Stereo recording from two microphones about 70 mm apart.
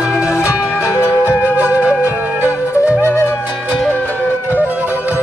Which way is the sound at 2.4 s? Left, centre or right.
Left.